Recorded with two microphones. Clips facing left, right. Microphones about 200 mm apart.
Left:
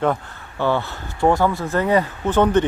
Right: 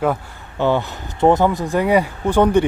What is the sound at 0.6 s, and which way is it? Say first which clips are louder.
Speech: right 3 dB; 15° right (ahead or behind).